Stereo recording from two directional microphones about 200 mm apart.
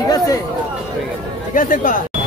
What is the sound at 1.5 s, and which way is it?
Speech, 40° left (ahead or behind).